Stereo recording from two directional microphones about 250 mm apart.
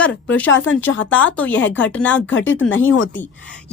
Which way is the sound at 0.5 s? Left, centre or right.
Left.